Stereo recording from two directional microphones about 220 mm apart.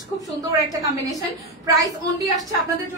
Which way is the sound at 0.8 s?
15° right (ahead or behind).